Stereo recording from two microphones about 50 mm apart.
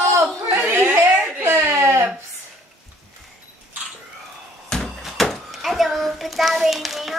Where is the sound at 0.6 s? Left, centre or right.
Right.